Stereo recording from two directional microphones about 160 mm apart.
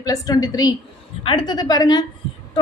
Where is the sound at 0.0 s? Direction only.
25° left (ahead or behind).